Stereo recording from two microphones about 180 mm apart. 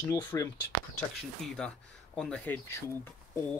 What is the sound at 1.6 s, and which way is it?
Speech, 5° left (ahead or behind).